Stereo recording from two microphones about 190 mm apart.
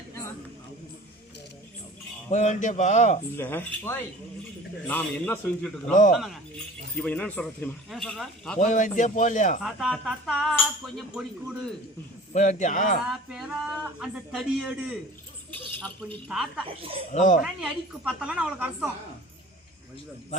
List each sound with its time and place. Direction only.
2.3 s a man's voice: 40° left (ahead or behind)
3.3 s a man's voice: 10° left (ahead or behind)
5.9 s speech: 45° left (ahead or behind)
6.9 s speech: 5° left (ahead or behind)
8.5 s a man's voice: 40° left (ahead or behind)
9.6 s speech: centre (ahead or behind)
12.3 s a man's voice: 40° left (ahead or behind)
13.1 s speech: centre (ahead or behind)
15.5 s a man's voice: 10° left (ahead or behind)
16.3 s speech: 5° right (ahead or behind)
16.6 s speech: 30° right (ahead or behind)
17.1 s a man's voice: 40° left (ahead or behind)
17.4 s speech: centre (ahead or behind)